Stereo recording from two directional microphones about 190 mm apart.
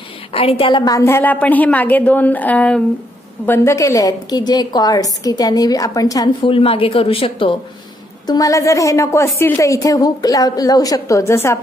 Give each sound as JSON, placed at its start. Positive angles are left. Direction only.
{"t": 0.3, "sound": "a woman's voice", "side_deg": 30}
{"t": 8.3, "sound": "a woman's voice", "side_deg": 15}